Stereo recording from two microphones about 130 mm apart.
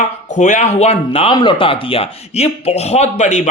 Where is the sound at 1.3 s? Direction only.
35° left (ahead or behind).